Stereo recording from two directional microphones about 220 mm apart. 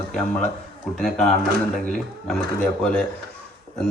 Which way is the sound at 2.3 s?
5° left (ahead or behind).